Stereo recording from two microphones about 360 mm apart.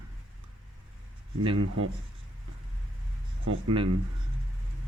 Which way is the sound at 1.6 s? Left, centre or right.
Right.